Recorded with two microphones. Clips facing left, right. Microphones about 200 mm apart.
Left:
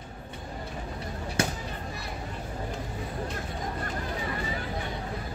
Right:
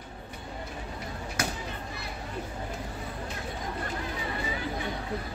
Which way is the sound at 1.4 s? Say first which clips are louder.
Left 4 dB; 30° left (ahead or behind).